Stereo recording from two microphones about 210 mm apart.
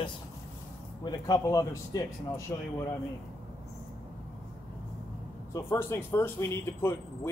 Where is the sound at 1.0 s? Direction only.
20° left (ahead or behind).